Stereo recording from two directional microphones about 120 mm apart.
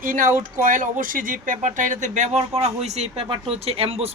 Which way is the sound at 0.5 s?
90° right.